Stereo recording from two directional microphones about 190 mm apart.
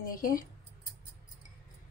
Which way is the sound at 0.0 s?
50° left (ahead or behind).